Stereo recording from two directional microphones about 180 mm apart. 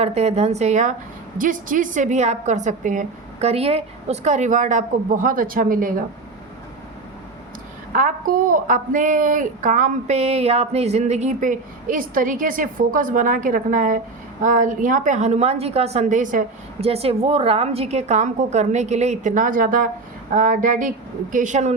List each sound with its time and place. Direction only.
0.0 s a woman's voice: 35° right (ahead or behind)
7.9 s speech: 50° right (ahead or behind)
16.8 s a woman's voice: 35° right (ahead or behind)